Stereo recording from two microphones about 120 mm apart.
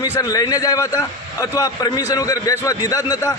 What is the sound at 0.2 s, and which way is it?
A man's voice, 30° left (ahead or behind).